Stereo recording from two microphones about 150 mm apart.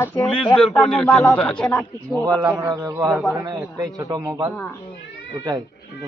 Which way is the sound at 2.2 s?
25° right (ahead or behind).